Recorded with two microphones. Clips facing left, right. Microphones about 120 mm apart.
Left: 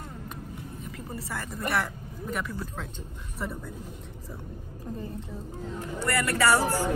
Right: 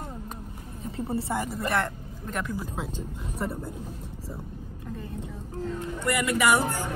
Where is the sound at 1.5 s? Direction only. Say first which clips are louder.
Right 2 dB; centre (ahead or behind).